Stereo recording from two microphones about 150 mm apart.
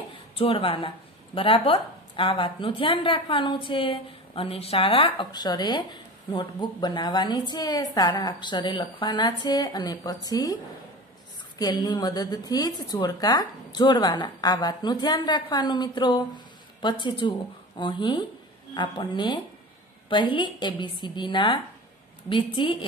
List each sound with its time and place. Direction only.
0.4 s a woman's voice: 40° left (ahead or behind)